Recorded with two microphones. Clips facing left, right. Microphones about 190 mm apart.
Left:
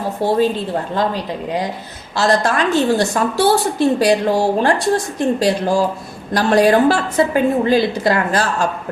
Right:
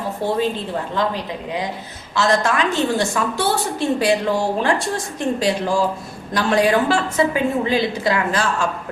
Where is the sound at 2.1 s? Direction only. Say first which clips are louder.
Left 2 dB; 35° left (ahead or behind).